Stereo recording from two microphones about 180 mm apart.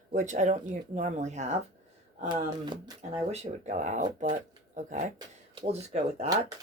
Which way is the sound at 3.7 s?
45° right (ahead or behind).